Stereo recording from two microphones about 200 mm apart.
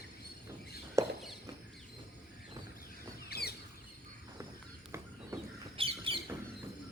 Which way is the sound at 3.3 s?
50° left (ahead or behind).